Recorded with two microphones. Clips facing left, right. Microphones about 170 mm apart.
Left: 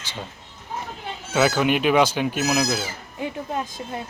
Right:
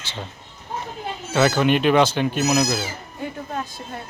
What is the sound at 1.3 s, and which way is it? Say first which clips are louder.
Speech: right 2 dB; 5° left (ahead or behind).